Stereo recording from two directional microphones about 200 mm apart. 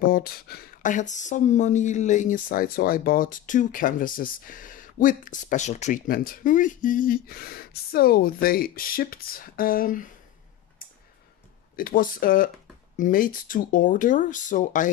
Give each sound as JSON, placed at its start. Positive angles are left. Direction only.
{"t": 0.0, "sound": "speech", "side_deg": 45}
{"t": 11.7, "sound": "speech", "side_deg": 45}